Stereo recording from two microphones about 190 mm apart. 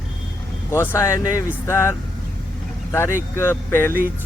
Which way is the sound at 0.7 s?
15° left (ahead or behind).